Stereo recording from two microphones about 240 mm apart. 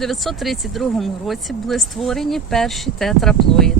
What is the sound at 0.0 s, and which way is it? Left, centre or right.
Speech, centre.